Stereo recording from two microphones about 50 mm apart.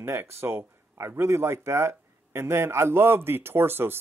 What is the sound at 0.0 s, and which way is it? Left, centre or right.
Speech, right.